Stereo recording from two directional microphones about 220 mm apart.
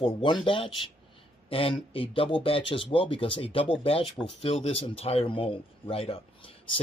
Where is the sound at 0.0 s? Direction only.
25° left (ahead or behind).